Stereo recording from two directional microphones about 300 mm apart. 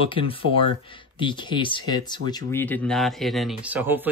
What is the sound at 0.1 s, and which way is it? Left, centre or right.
Speech, centre.